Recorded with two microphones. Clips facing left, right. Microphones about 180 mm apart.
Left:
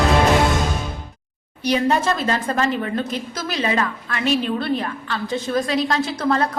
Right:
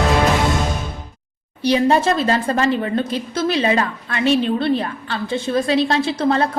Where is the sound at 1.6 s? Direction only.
30° right (ahead or behind).